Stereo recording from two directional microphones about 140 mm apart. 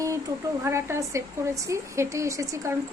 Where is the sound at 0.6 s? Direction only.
20° right (ahead or behind).